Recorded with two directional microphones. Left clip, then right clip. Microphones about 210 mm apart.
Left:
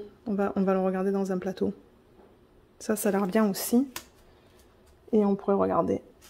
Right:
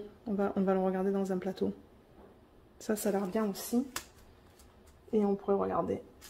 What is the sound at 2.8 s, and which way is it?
Speech, 35° left (ahead or behind).